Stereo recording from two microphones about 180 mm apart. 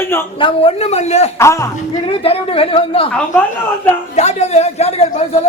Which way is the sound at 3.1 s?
10° left (ahead or behind).